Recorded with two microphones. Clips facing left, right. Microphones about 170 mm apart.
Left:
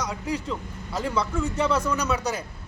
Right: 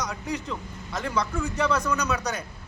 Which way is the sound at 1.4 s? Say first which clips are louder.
Left 2 dB; 25° left (ahead or behind).